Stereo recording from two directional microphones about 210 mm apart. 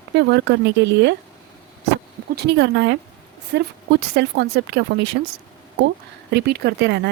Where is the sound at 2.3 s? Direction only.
55° right (ahead or behind).